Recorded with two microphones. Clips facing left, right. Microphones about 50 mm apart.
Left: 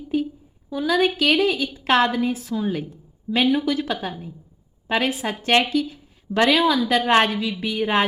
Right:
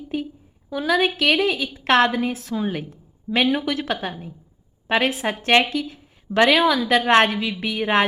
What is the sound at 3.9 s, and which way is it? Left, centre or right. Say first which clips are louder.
A woman's voice: right 1 dB; centre.